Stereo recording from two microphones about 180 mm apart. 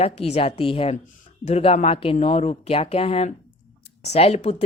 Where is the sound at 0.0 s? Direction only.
35° left (ahead or behind).